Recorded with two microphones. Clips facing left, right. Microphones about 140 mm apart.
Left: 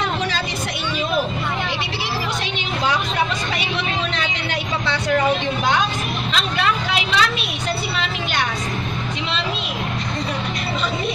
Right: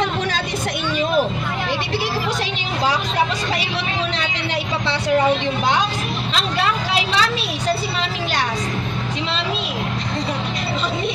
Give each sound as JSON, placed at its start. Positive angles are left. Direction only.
{"t": 6.3, "sound": "vehicle", "side_deg": -30}